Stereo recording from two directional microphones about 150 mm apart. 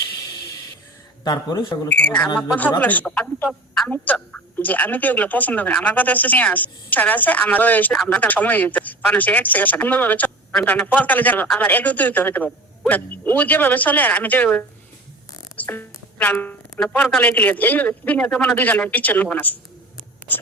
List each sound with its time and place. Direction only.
1.2 s a man's voice: 25° left (ahead or behind)
1.9 s a man's voice: 10° left (ahead or behind)